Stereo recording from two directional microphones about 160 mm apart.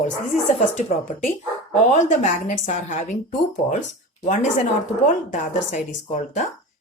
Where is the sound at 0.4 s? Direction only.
50° left (ahead or behind).